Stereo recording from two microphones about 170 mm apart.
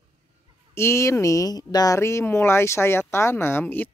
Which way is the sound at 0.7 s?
15° left (ahead or behind).